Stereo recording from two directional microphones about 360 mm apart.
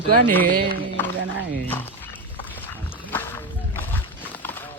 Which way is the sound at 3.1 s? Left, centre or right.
Centre.